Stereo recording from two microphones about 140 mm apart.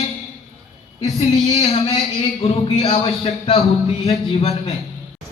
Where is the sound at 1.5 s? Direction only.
45° left (ahead or behind).